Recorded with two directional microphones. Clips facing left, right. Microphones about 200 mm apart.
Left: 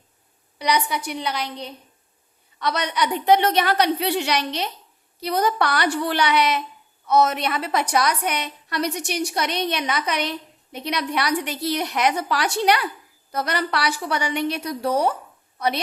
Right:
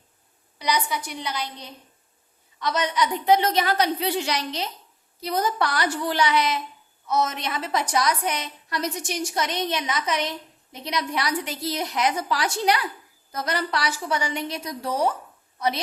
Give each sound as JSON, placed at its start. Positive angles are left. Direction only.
{"t": 0.6, "sound": "a woman's voice", "side_deg": 65}